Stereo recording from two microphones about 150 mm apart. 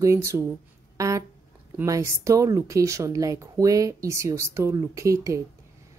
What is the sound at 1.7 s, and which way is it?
Speech, 20° right (ahead or behind).